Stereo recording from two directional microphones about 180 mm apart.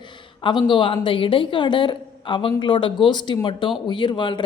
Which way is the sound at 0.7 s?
30° left (ahead or behind).